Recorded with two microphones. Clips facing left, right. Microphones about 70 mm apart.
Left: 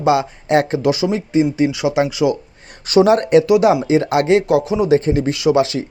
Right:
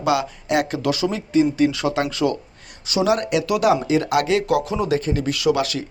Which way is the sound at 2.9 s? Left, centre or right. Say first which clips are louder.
Left 8 dB; left.